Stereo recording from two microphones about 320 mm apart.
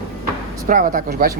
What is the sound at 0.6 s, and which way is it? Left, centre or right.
Speech, right.